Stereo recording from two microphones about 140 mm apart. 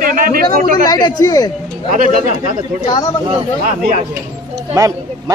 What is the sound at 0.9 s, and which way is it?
Speech, 25° left (ahead or behind).